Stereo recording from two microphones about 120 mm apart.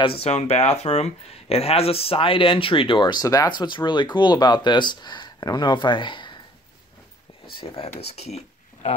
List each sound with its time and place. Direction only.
0.0 s speech: 55° left (ahead or behind)
7.5 s speech: 50° left (ahead or behind)
8.0 s speech: 65° left (ahead or behind)